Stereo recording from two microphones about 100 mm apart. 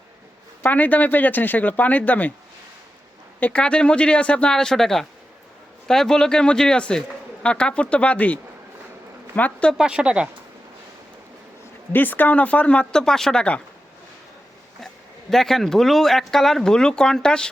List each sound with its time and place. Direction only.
0.6 s speech: 15° left (ahead or behind)
3.4 s speech: 10° left (ahead or behind)
9.7 s speech: 10° right (ahead or behind)
11.9 s speech: 20° left (ahead or behind)
15.3 s speech: 5° left (ahead or behind)